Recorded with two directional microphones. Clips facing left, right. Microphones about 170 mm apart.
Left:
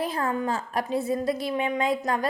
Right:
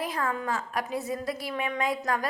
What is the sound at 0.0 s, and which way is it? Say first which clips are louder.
A woman's voice: left 4 dB; 30° left (ahead or behind).